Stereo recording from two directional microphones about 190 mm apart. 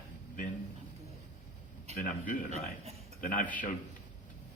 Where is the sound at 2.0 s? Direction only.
45° left (ahead or behind).